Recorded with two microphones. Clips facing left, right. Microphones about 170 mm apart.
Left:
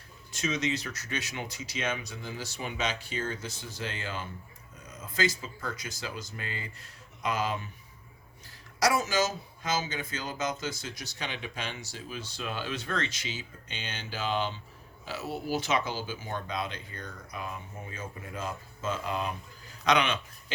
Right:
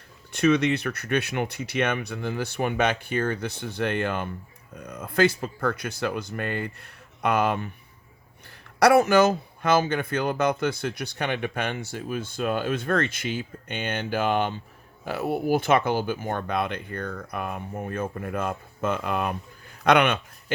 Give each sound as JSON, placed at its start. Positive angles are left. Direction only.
{"t": 0.3, "sound": "speech", "side_deg": -60}
{"t": 8.8, "sound": "speech", "side_deg": -60}